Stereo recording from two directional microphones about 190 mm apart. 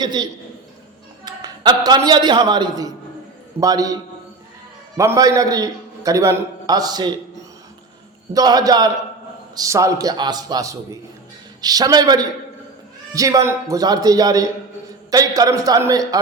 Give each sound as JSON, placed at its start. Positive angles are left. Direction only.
{"t": 0.0, "sound": "a man's voice", "side_deg": -20}
{"t": 4.9, "sound": "a man's voice", "side_deg": -15}
{"t": 8.3, "sound": "a man's voice", "side_deg": -20}